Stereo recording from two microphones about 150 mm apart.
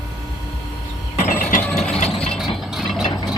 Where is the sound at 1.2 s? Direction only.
60° left (ahead or behind).